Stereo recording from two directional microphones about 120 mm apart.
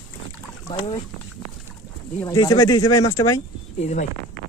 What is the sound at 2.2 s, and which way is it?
Speech, 35° left (ahead or behind).